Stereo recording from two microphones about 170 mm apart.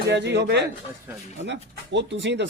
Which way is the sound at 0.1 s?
90° right.